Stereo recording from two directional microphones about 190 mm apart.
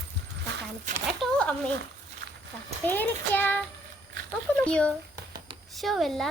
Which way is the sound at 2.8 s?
10° left (ahead or behind).